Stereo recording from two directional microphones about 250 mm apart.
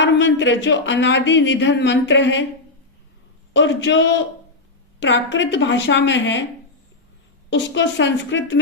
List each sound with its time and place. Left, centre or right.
0.0 s speech: left
3.5 s speech: left
7.5 s speech: left